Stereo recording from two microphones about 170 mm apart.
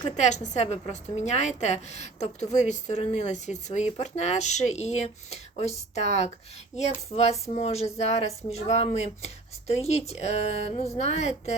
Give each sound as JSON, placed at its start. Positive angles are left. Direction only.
{"t": 0.2, "sound": "a woman's voice", "side_deg": 40}